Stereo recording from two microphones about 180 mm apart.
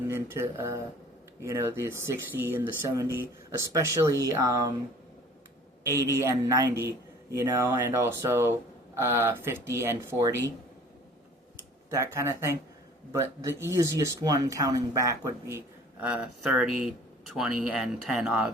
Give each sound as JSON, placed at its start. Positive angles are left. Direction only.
{"t": 0.1, "sound": "speech", "side_deg": -15}
{"t": 5.8, "sound": "speech", "side_deg": -15}
{"t": 11.9, "sound": "speech", "side_deg": -15}